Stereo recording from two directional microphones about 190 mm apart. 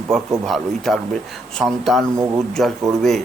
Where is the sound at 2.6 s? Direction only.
Centre (ahead or behind).